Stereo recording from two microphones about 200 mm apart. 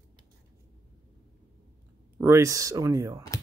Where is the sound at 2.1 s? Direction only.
15° right (ahead or behind).